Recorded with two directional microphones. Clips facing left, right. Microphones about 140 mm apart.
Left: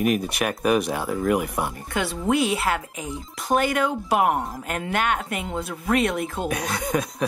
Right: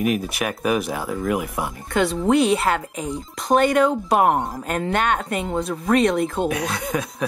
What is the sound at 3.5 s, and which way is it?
Speech, 25° right (ahead or behind).